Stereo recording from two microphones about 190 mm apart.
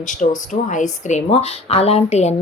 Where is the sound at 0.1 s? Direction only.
40° left (ahead or behind).